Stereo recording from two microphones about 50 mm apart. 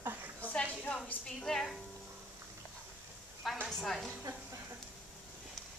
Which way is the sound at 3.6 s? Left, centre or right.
Centre.